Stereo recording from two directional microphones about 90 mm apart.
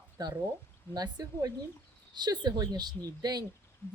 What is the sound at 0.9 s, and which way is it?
Speech, 50° right (ahead or behind).